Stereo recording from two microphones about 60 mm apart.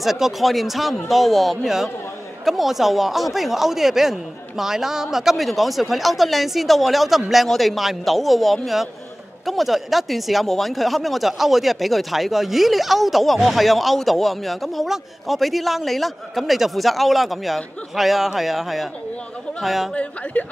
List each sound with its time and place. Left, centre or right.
0.0 s speech: centre
19.9 s a woman's voice: left